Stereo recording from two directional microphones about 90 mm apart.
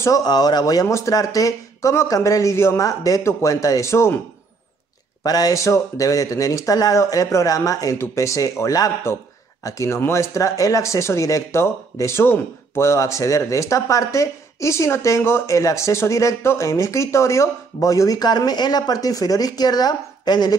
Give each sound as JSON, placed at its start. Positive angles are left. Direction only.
{"t": 0.0, "sound": "speech", "side_deg": 45}
{"t": 5.2, "sound": "speech", "side_deg": 45}